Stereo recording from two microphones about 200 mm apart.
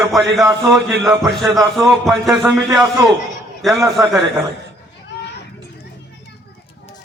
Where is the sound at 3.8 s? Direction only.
15° right (ahead or behind).